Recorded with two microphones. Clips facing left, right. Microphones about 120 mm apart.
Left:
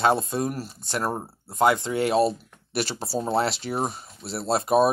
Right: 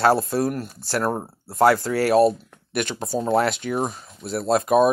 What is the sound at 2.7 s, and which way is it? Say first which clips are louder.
Speech: right 2 dB; 35° left (ahead or behind).